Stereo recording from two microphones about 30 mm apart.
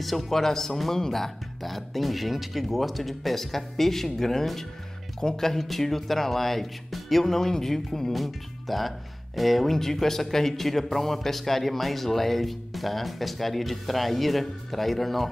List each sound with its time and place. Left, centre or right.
0.0 s speech: centre
1.6 s speech: centre